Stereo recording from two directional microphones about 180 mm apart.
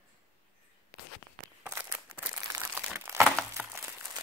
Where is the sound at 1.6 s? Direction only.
10° right (ahead or behind).